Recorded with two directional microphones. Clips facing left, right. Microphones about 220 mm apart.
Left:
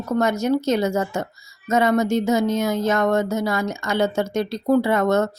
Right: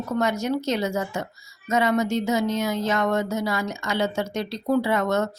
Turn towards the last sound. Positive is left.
turn(degrees=50)  # may be behind; listen again after turning